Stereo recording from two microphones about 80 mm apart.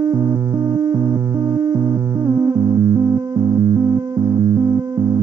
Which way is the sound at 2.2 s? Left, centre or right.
Right.